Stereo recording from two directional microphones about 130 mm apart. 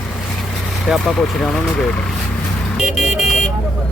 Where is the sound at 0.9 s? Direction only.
Centre (ahead or behind).